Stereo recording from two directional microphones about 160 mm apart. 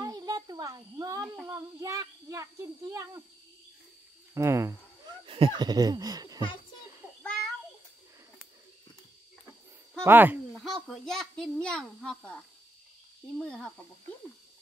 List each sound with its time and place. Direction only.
0.0 s a sound: 25° right (ahead or behind)
1.2 s child singing: 10° right (ahead or behind)
1.5 s a child's voice: 20° right (ahead or behind)
4.3 s speech: 20° right (ahead or behind)
5.2 s speech: 35° right (ahead or behind)
10.0 s speech: 10° right (ahead or behind)
10.5 s a child's voice: centre (ahead or behind)
13.4 s speech: 5° left (ahead or behind)